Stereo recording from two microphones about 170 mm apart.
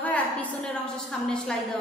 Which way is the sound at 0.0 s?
10° left (ahead or behind).